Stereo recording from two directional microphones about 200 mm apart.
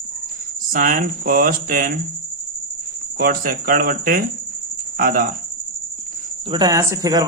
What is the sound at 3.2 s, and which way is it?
Speech, 45° right (ahead or behind).